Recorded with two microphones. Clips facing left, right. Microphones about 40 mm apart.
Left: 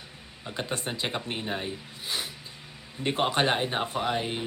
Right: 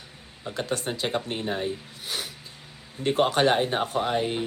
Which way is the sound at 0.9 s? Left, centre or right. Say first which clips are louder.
Right 3 dB; centre.